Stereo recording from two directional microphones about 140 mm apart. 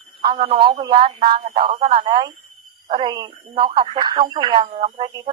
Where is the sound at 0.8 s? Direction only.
35° right (ahead or behind).